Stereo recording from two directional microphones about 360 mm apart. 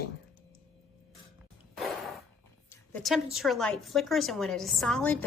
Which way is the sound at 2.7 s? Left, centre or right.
Centre.